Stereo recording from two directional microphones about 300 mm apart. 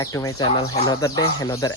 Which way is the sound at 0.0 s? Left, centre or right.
Centre.